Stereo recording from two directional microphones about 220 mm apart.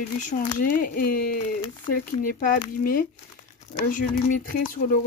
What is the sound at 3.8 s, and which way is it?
Speech, 35° left (ahead or behind).